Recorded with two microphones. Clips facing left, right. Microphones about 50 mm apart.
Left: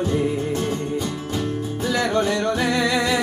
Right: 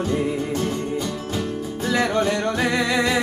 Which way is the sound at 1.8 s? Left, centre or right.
Right.